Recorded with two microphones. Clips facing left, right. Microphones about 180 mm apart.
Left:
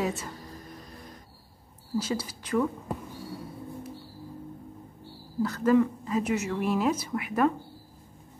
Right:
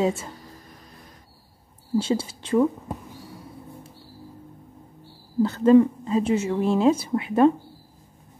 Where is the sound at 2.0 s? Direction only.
25° right (ahead or behind).